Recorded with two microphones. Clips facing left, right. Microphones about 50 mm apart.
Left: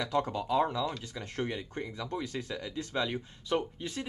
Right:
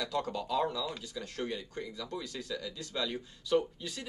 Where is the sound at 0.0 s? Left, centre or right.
Left.